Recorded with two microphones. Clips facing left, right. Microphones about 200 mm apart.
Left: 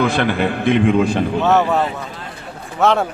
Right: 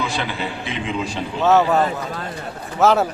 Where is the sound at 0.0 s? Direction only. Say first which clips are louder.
Left 8 dB; 55° left (ahead or behind).